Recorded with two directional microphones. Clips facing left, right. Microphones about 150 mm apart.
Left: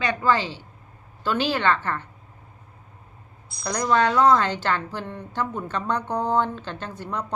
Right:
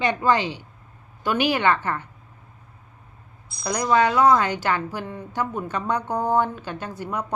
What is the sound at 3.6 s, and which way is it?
A woman's voice, 5° right (ahead or behind).